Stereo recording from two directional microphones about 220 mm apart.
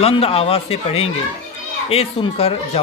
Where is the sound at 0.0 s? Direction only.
25° left (ahead or behind).